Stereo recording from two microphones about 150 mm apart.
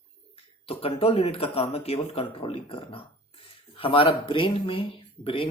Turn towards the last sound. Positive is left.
turn(degrees=35)  # may be behind; listen again after turning